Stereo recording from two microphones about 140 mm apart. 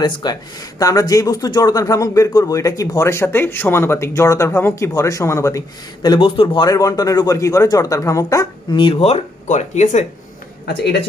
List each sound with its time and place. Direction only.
0.0 s speech: 30° left (ahead or behind)
6.0 s speech: 35° left (ahead or behind)
8.7 s speech: 40° left (ahead or behind); by 10.0 s 55° left (ahead or behind)